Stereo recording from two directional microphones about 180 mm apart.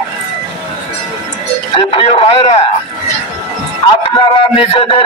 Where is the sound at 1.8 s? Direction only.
30° left (ahead or behind).